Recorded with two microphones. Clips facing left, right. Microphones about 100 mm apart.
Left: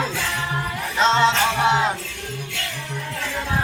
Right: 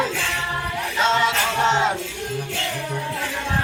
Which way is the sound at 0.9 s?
30° left (ahead or behind).